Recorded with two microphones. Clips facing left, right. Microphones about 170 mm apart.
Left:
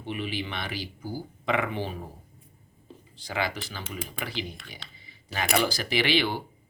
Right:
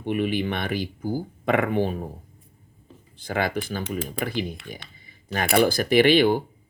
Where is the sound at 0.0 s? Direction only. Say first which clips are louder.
Right 8 dB; 50° right (ahead or behind).